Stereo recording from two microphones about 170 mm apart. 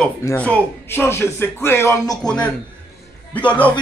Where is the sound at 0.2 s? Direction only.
10° left (ahead or behind).